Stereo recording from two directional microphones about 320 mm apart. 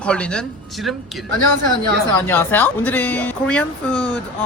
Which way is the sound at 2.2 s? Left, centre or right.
Centre.